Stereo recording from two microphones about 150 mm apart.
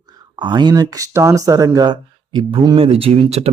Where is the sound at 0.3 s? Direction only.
30° right (ahead or behind).